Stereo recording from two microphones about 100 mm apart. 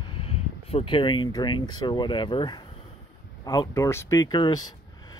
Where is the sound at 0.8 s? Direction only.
55° left (ahead or behind).